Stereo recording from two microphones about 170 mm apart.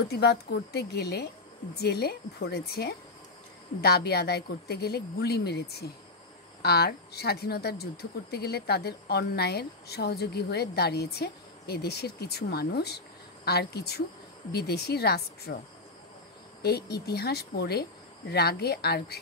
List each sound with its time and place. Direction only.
0.1 s speech: 70° left (ahead or behind)
16.6 s speech: 70° left (ahead or behind)